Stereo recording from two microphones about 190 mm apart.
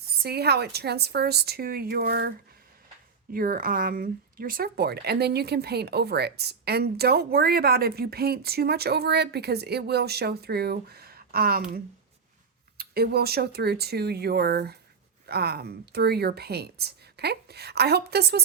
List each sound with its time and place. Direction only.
0.2 s speech: 55° right (ahead or behind)
3.3 s speech: 50° right (ahead or behind)
12.7 s speech: 55° right (ahead or behind)